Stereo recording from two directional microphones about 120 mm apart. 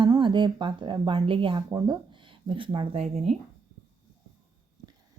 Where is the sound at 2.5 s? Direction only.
45° right (ahead or behind).